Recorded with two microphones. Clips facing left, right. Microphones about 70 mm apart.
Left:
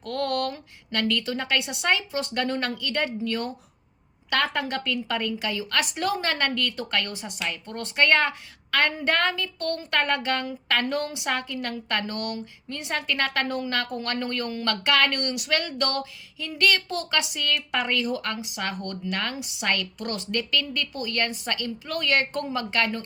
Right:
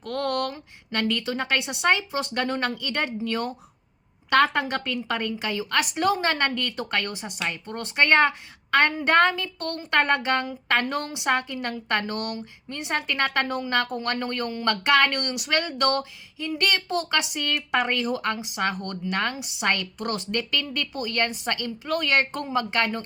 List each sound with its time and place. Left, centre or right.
0.0 s speech: right